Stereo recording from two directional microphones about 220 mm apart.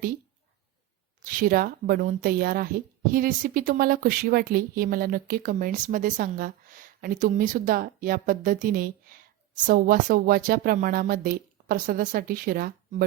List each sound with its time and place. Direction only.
1.2 s speech: 40° right (ahead or behind)